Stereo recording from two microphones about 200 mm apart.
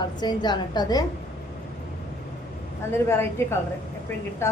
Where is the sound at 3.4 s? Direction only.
15° left (ahead or behind).